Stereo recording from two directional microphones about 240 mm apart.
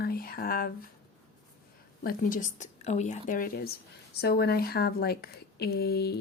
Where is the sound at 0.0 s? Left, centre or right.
Left.